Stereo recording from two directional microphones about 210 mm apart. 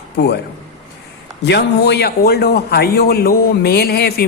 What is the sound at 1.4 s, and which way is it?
Speech, 55° left (ahead or behind).